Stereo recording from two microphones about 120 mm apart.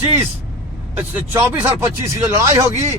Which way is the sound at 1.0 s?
15° right (ahead or behind).